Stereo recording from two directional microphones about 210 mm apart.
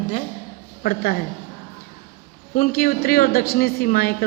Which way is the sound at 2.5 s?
45° left (ahead or behind).